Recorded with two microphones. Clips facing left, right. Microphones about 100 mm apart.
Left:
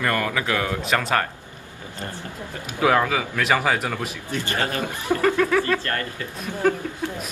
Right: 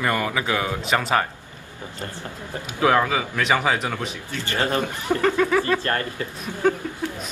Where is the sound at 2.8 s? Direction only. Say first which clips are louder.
Even; centre (ahead or behind).